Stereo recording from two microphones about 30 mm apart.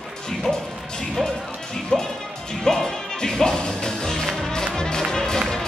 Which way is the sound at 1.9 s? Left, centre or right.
Left.